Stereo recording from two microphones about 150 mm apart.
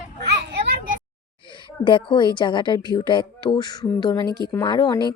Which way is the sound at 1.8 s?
30° left (ahead or behind).